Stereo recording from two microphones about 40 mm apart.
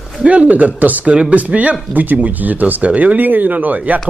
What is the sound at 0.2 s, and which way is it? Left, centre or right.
Speech, right.